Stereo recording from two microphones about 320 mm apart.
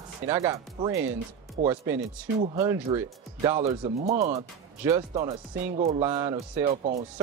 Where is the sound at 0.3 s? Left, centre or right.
Centre.